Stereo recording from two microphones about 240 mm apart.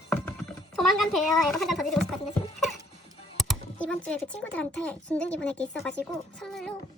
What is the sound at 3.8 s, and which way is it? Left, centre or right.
A woman's voice, centre.